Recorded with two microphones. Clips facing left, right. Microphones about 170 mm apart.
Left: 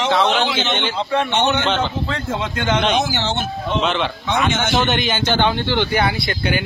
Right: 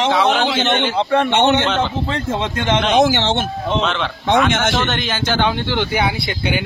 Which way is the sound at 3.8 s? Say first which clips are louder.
Even; 5° left (ahead or behind).